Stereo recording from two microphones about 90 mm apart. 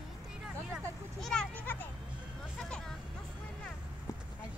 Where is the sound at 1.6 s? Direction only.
20° left (ahead or behind).